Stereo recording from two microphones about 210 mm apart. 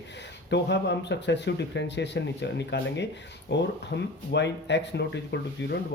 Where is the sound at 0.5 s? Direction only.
55° left (ahead or behind).